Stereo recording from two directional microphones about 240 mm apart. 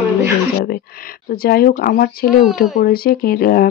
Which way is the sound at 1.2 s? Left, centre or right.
Left.